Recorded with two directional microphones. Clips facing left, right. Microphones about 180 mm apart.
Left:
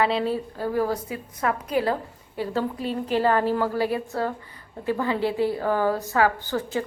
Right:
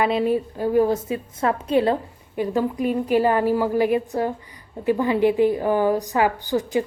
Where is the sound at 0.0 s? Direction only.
15° right (ahead or behind).